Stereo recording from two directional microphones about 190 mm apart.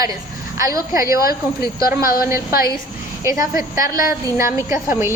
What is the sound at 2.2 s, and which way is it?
A woman's voice, 15° right (ahead or behind).